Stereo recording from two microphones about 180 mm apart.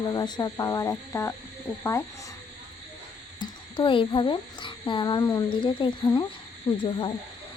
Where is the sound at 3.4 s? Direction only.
25° left (ahead or behind).